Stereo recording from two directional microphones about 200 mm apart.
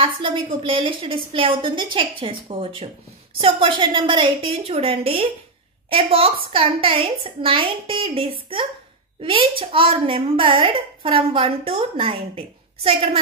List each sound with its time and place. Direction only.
0.0 s a woman's voice: 25° right (ahead or behind)